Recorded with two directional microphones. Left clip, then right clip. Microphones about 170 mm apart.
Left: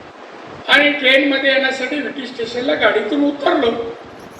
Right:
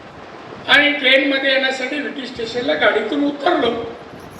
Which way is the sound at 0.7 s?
25° right (ahead or behind).